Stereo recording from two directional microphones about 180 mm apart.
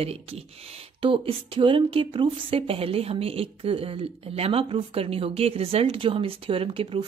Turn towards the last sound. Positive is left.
turn(degrees=-30)  # may be behind; listen again after turning